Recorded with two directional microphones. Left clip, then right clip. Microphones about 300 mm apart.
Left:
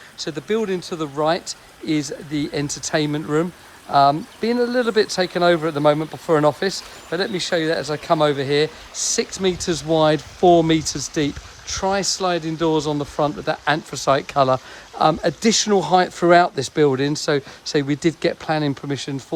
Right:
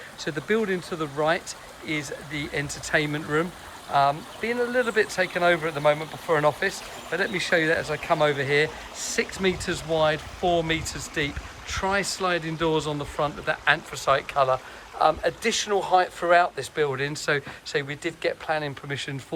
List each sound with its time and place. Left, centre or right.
0.2 s speech: centre
10.4 s speech: left
10.7 s speech: centre